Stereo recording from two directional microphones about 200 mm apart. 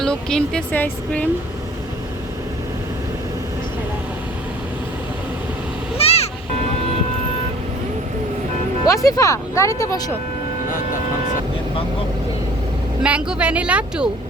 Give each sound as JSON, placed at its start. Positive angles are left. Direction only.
{"t": 0.0, "sound": "speech", "side_deg": 5}
{"t": 6.0, "sound": "music", "side_deg": 30}
{"t": 8.9, "sound": "speech", "side_deg": 15}
{"t": 13.0, "sound": "speech", "side_deg": -5}